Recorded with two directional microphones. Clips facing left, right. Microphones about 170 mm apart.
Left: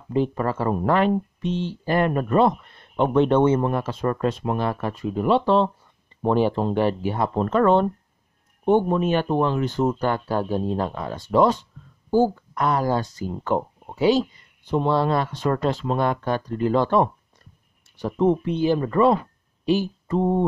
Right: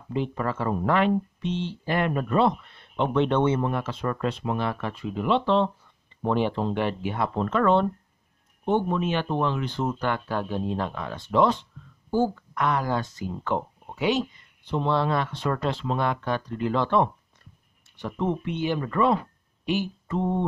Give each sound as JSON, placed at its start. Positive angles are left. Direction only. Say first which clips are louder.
{"t": 0.1, "sound": "speech", "louder": "left 5 dB", "side_deg": 40}
{"t": 19.6, "sound": "mantra", "louder": "left 5 dB", "side_deg": 35}